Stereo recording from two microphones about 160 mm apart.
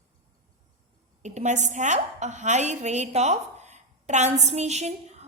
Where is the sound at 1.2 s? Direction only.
45° right (ahead or behind).